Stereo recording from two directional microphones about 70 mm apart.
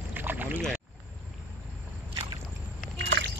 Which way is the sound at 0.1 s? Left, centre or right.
Right.